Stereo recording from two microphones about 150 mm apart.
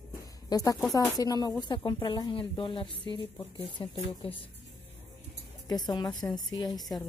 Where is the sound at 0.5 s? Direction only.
25° left (ahead or behind).